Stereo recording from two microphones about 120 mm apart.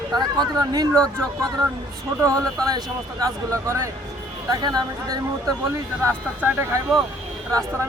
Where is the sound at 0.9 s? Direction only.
10° left (ahead or behind).